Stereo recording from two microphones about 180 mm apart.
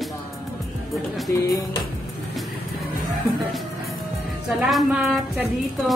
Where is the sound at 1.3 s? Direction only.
20° left (ahead or behind).